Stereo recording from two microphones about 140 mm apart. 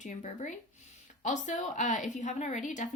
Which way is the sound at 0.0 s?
60° left (ahead or behind).